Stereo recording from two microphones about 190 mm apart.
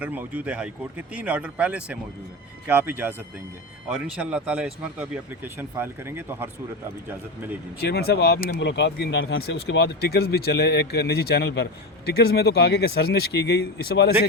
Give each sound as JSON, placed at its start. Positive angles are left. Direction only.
{"t": 0.0, "sound": "speech", "side_deg": -10}
{"t": 7.8, "sound": "speech", "side_deg": 60}
{"t": 9.4, "sound": "speech", "side_deg": 60}